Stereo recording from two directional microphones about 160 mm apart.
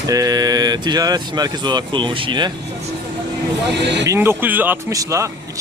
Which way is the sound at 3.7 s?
90° right.